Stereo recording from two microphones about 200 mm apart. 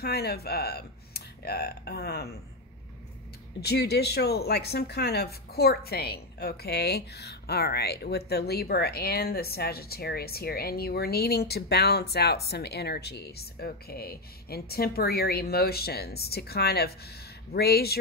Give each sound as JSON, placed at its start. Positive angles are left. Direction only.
{"t": 0.0, "sound": "speech", "side_deg": 50}
{"t": 3.6, "sound": "a woman's voice", "side_deg": 55}